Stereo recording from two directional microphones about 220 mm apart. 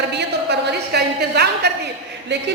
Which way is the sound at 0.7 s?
50° right (ahead or behind).